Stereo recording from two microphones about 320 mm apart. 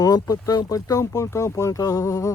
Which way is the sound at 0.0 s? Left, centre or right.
Centre.